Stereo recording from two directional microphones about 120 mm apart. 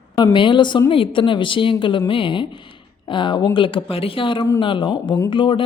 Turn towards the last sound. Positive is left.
turn(degrees=45)  # may be behind; listen again after turning